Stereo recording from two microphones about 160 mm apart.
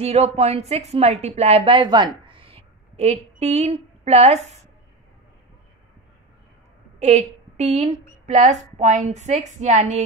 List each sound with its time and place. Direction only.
0.0 s a woman's voice: 40° right (ahead or behind)
7.0 s a woman's voice: 45° right (ahead or behind)